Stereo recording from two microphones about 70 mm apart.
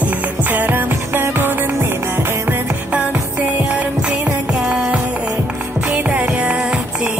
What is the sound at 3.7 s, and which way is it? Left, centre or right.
Music, centre.